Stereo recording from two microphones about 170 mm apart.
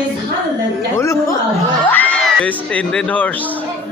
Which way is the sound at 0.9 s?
15° left (ahead or behind).